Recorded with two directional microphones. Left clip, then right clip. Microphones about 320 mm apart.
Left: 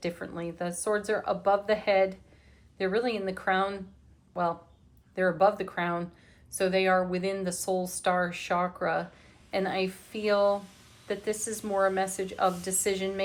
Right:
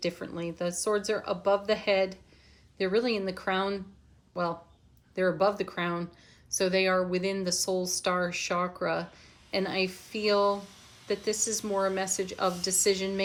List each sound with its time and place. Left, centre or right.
0.0 s speech: centre
5.1 s speech: centre